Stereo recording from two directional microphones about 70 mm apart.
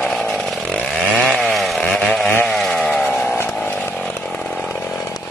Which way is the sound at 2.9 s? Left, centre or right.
Left.